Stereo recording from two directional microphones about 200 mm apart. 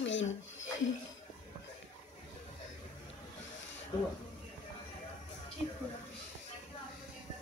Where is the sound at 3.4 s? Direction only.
65° left (ahead or behind).